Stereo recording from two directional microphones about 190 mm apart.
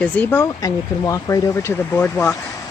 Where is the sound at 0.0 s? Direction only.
10° left (ahead or behind).